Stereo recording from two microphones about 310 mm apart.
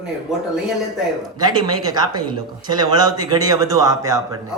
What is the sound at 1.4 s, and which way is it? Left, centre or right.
Speech, centre.